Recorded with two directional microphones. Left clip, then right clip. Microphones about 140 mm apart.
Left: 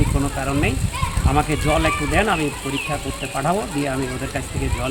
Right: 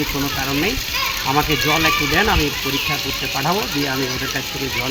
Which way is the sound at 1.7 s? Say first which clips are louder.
Right 1 dB; 50° left (ahead or behind).